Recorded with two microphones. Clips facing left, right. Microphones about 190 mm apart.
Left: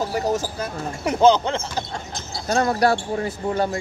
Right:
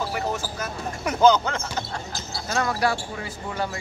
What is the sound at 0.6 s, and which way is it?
Speech, 30° left (ahead or behind).